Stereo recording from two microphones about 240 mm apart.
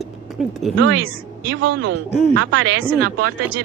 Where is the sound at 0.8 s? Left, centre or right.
Right.